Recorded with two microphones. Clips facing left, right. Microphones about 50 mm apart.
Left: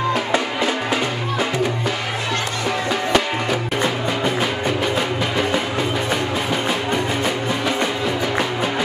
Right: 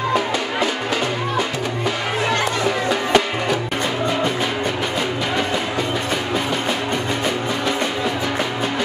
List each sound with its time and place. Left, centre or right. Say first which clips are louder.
3.1 s music: right 1 dB; centre